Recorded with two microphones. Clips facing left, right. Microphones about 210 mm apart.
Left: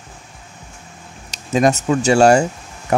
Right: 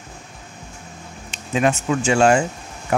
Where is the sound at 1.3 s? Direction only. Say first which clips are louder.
Left 4 dB; 40° left (ahead or behind).